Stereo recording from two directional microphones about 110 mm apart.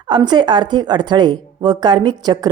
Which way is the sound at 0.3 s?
45° right (ahead or behind).